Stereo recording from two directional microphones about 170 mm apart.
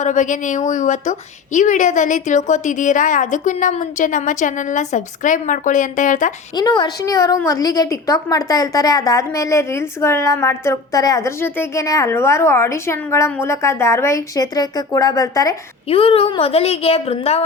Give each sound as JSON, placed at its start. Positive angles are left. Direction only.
{"t": 0.0, "sound": "a woman's voice", "side_deg": 45}
{"t": 6.6, "sound": "a woman's voice", "side_deg": 25}
{"t": 15.9, "sound": "a woman's voice", "side_deg": 35}